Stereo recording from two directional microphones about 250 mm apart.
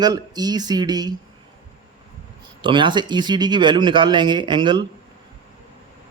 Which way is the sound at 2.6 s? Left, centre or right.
Centre.